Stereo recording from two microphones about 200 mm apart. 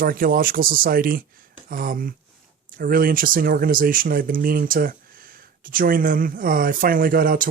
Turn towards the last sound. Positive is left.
turn(degrees=-45)  # may be behind; listen again after turning